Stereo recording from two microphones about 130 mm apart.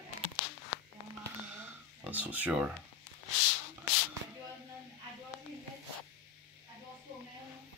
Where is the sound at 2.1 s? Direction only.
10° right (ahead or behind).